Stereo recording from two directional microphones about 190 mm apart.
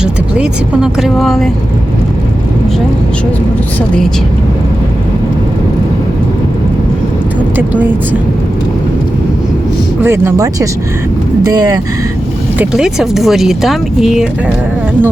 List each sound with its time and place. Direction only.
0.0 s speech: 5° right (ahead or behind)
7.5 s speech: 10° right (ahead or behind)
10.0 s speech: 15° right (ahead or behind)
12.5 s speech: 5° right (ahead or behind)